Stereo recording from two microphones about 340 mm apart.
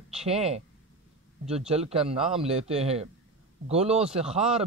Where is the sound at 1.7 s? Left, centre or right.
Centre.